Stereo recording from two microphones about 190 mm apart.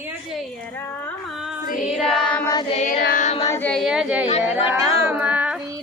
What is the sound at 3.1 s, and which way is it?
Child singing, 40° left (ahead or behind).